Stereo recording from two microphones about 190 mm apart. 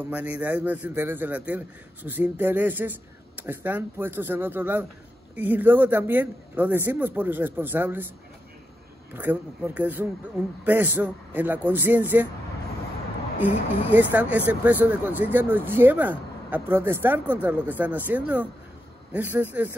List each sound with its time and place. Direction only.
0.0 s speech: 10° right (ahead or behind)
9.1 s speech: 10° right (ahead or behind)
13.8 s speech: 10° right (ahead or behind)